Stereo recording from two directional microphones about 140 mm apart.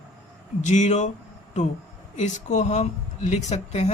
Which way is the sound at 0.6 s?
60° left (ahead or behind).